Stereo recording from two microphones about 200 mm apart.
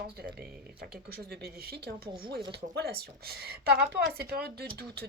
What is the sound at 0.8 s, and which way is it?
A woman's voice, 50° right (ahead or behind).